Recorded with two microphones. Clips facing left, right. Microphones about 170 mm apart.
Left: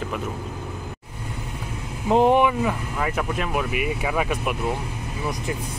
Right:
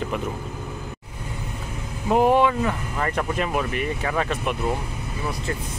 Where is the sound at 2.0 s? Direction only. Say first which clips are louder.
Left 1 dB; 20° left (ahead or behind).